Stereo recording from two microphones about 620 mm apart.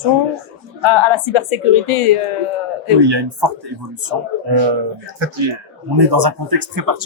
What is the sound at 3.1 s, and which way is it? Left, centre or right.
Speech, right.